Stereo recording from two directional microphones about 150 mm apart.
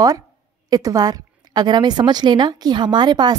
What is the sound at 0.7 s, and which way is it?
A woman's voice, 25° right (ahead or behind).